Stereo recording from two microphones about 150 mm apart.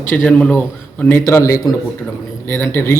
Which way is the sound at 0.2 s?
5° left (ahead or behind).